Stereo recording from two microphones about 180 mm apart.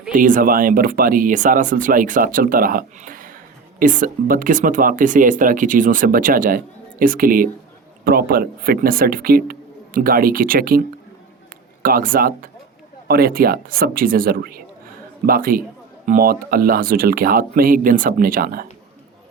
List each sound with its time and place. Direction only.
0.1 s speech: 45° right (ahead or behind)